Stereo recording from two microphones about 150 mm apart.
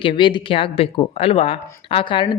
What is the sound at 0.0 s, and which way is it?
A man's voice, 35° left (ahead or behind).